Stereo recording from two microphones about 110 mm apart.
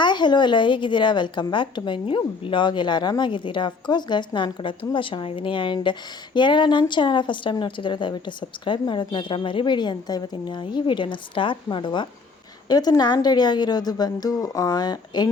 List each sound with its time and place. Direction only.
0.0 s a woman's voice: 45° left (ahead or behind)